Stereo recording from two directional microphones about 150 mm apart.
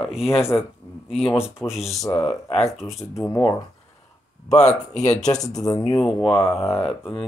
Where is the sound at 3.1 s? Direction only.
25° left (ahead or behind).